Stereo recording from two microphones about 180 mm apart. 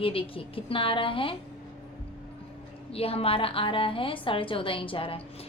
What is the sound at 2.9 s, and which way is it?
A woman's voice, 30° left (ahead or behind).